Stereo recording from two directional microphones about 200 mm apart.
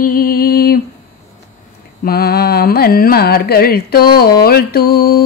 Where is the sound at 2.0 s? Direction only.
50° left (ahead or behind).